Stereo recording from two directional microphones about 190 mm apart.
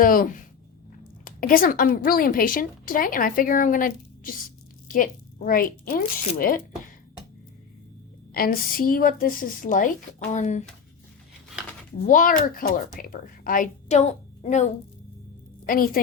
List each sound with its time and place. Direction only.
0.0 s a woman's voice: 45° left (ahead or behind)
8.3 s a woman's voice: 50° left (ahead or behind)
12.0 s a woman's voice: 45° left (ahead or behind)